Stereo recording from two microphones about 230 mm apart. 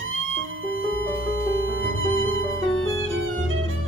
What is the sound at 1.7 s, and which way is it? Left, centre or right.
Music, right.